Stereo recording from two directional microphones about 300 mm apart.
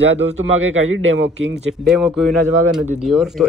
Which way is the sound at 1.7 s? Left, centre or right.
Centre.